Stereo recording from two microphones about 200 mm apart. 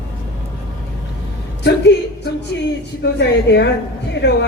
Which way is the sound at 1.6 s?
60° left (ahead or behind).